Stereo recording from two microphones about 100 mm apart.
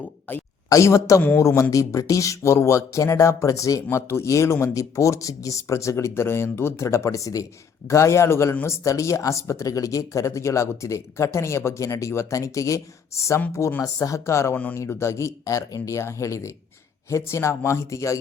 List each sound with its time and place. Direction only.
0.3 s speech: 20° left (ahead or behind)
0.7 s speech: 30° left (ahead or behind)
14.5 s speech: 15° left (ahead or behind)
14.8 s speech: 25° left (ahead or behind)